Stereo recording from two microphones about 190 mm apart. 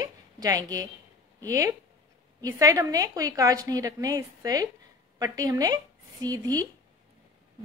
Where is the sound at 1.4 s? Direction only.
20° right (ahead or behind).